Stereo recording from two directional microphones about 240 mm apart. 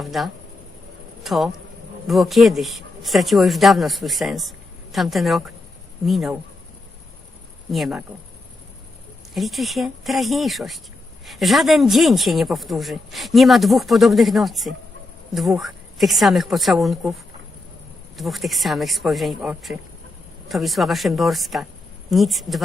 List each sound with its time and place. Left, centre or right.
0.0 s speech: centre
7.7 s speech: centre
9.3 s speech: centre
18.2 s speech: centre